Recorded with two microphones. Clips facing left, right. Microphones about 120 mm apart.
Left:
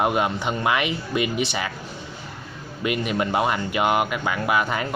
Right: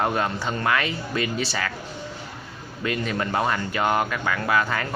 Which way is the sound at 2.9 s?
15° left (ahead or behind).